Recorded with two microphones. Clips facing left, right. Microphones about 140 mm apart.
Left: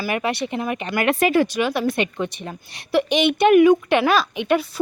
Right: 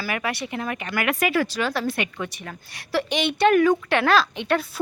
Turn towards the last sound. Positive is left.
turn(degrees=15)  # may be behind; listen again after turning